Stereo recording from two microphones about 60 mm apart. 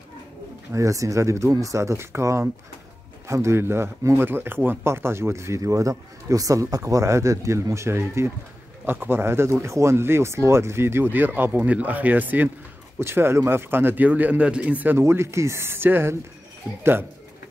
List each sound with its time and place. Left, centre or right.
0.7 s a man's voice: right
13.0 s a man's voice: right
15.0 s a man's voice: right
16.6 s speech: left